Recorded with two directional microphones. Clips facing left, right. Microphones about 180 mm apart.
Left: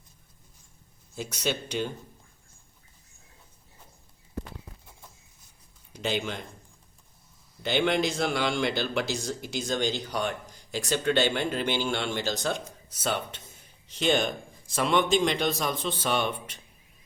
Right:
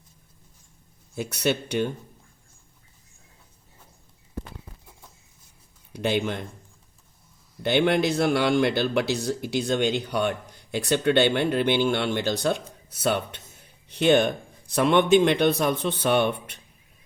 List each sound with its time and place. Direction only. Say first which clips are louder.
1.1 s a man's voice: right 5 dB; 60° right (ahead or behind)
5.9 s speech: right 5 dB; 55° right (ahead or behind)
7.6 s a man's voice: right 4 dB; 55° right (ahead or behind)